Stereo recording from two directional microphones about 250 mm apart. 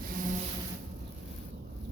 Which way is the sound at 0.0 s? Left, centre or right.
Right.